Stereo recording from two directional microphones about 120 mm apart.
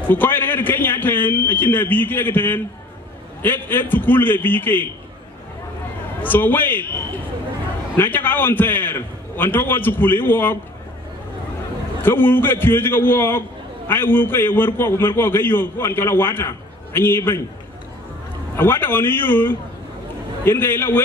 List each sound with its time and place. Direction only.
0.1 s a man's voice: 15° left (ahead or behind)
6.2 s a man's voice: 15° left (ahead or behind)
7.9 s a man's voice: 15° left (ahead or behind)
12.0 s a man's voice: 15° left (ahead or behind)
18.6 s a man's voice: 20° left (ahead or behind)